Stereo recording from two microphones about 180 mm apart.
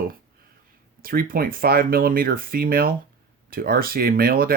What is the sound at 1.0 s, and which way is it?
Speech, 55° right (ahead or behind).